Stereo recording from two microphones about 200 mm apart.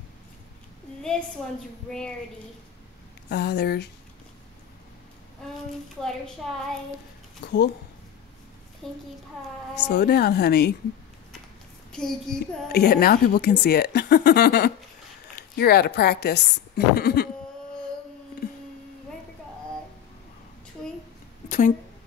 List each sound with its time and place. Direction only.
1.9 s a woman's voice: 5° left (ahead or behind)
3.3 s speech: 55° left (ahead or behind)
6.0 s a woman's voice: centre (ahead or behind)
7.4 s speech: 60° left (ahead or behind)
8.8 s a woman's voice: centre (ahead or behind)
9.8 s speech: 55° left (ahead or behind)
11.9 s a woman's voice: 5° left (ahead or behind)
12.6 s a woman's voice: 55° left (ahead or behind)
21.5 s a sound: 40° left (ahead or behind)